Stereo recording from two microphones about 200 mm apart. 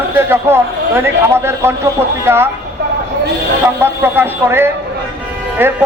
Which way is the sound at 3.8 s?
10° right (ahead or behind).